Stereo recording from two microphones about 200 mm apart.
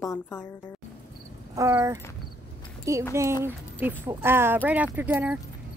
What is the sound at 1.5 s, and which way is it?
A woman's voice, 15° right (ahead or behind).